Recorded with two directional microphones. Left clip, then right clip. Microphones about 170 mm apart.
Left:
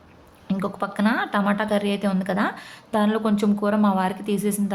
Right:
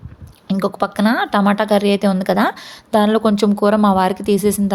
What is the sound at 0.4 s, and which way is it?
A woman's voice, 35° right (ahead or behind).